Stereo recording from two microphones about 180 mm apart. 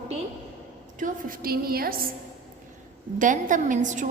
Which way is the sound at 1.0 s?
50° right (ahead or behind).